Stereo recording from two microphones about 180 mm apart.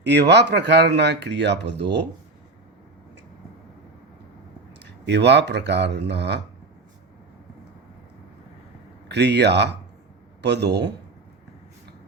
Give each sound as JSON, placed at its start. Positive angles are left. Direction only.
{"t": 0.0, "sound": "speech", "side_deg": -70}
{"t": 4.8, "sound": "speech", "side_deg": -70}
{"t": 9.0, "sound": "speech", "side_deg": -70}